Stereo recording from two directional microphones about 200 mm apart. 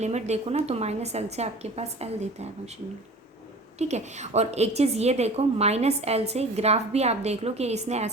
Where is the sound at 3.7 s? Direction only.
35° right (ahead or behind).